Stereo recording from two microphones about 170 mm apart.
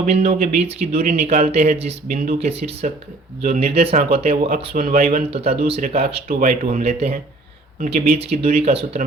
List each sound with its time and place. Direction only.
0.0 s speech: 40° right (ahead or behind)
4.7 s speech: 55° right (ahead or behind)
5.1 s speech: 35° right (ahead or behind)
6.2 s speech: 50° right (ahead or behind)